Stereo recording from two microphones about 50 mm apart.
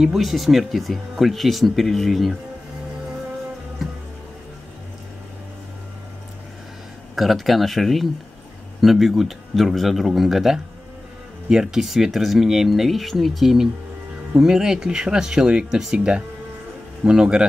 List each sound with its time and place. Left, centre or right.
0.0 s speech: centre
7.2 s speech: centre